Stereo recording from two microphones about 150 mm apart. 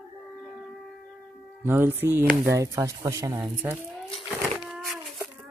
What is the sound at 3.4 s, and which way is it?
Speech, 10° right (ahead or behind).